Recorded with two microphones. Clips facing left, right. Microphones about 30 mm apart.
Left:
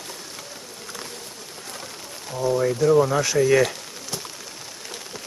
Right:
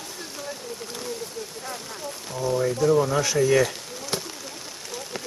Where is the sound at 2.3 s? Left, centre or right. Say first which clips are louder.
Left 3 dB; centre.